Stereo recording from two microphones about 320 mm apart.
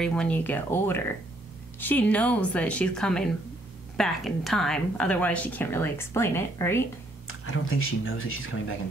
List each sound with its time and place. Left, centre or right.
0.0 s a woman's voice: centre
7.2 s speech: left